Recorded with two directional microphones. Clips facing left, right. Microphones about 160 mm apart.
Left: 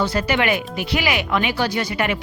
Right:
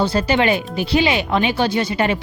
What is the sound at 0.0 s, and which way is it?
Speech, 30° right (ahead or behind).